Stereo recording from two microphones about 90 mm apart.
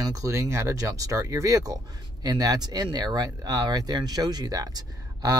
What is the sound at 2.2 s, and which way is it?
Speech, 50° right (ahead or behind).